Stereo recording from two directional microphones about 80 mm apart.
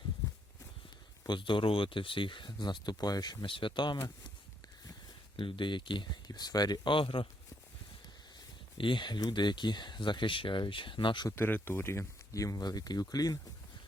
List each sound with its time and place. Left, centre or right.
1.3 s speech: left
5.4 s speech: left
6.2 s speech: left
8.8 s speech: left
11.3 s speech: left
12.6 s speech: left